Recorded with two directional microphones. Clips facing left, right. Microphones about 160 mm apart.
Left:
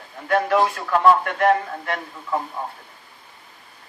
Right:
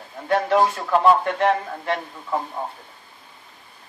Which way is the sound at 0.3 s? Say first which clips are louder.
Even; 30° right (ahead or behind).